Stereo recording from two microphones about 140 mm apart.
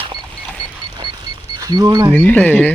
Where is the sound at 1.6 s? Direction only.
25° right (ahead or behind).